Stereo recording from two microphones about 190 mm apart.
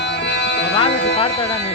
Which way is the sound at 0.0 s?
65° left (ahead or behind).